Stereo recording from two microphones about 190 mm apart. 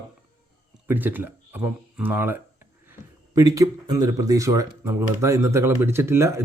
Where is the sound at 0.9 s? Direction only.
10° right (ahead or behind).